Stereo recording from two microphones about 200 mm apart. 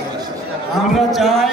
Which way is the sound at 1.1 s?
Centre (ahead or behind).